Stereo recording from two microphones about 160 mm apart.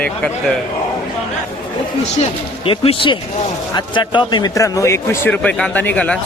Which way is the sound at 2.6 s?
35° left (ahead or behind).